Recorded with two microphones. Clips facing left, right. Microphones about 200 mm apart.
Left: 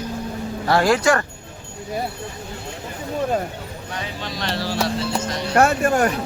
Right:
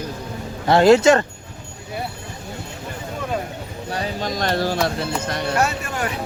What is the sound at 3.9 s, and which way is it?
Music, 40° right (ahead or behind).